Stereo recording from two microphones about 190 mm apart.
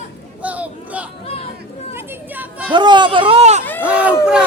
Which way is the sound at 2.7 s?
25° right (ahead or behind).